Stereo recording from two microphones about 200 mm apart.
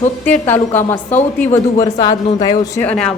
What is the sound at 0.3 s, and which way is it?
A woman's voice, 10° left (ahead or behind).